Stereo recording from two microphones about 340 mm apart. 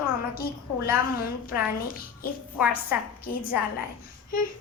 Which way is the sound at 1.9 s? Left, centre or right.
Left.